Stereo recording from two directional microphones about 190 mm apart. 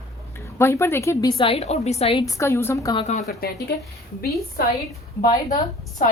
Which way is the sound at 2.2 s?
15° left (ahead or behind).